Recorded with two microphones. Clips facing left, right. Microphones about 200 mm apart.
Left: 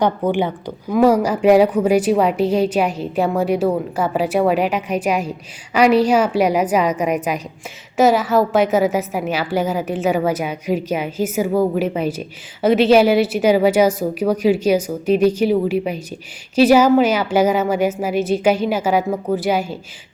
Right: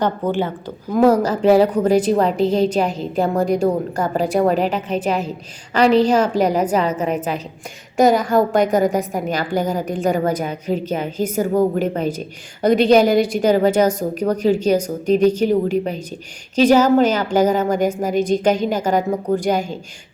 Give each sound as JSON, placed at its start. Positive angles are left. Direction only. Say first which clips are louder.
{"t": 0.0, "sound": "a woman's voice", "louder": "left 2 dB", "side_deg": 15}